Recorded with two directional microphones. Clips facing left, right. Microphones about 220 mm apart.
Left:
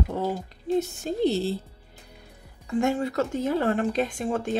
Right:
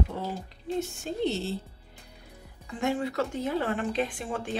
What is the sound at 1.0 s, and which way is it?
Speech, 35° left (ahead or behind).